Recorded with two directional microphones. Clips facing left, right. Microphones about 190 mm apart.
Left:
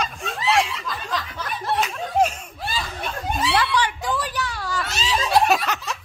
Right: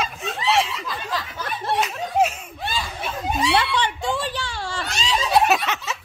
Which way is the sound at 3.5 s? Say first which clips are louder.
Even; 25° right (ahead or behind).